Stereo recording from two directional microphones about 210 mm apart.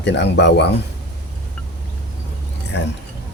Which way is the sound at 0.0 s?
55° left (ahead or behind).